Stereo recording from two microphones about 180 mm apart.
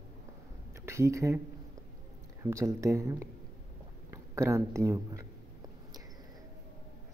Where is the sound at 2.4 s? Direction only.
15° right (ahead or behind).